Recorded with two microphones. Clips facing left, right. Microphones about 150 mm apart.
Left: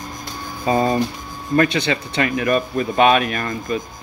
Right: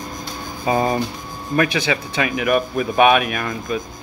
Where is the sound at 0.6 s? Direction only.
15° right (ahead or behind).